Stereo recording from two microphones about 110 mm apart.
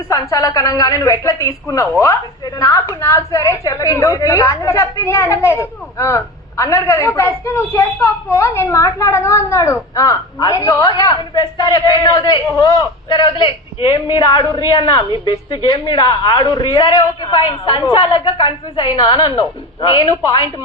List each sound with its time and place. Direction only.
0.1 s a woman's voice: 30° left (ahead or behind)